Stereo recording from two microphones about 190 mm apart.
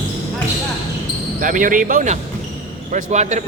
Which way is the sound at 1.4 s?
45° right (ahead or behind).